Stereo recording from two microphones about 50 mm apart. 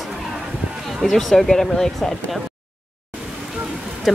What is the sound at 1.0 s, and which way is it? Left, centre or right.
Speech, centre.